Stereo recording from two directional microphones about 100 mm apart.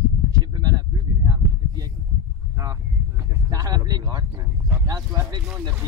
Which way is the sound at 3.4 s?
40° right (ahead or behind).